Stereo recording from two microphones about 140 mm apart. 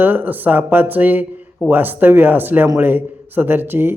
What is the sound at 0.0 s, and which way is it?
Speech, 15° right (ahead or behind).